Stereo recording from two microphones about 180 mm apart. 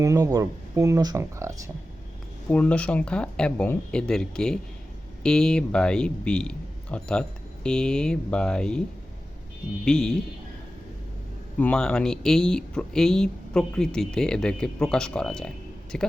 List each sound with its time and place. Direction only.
0.0 s speech: 20° right (ahead or behind)
2.5 s speech: 5° left (ahead or behind)
9.8 s speech: 5° left (ahead or behind)
11.6 s speech: 5° left (ahead or behind)